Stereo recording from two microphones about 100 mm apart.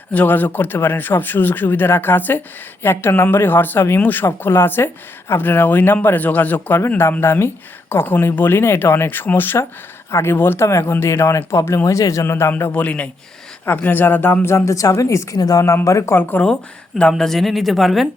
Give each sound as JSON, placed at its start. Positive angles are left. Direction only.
{"t": 0.1, "sound": "speech", "side_deg": 15}
{"t": 17.0, "sound": "speech", "side_deg": 5}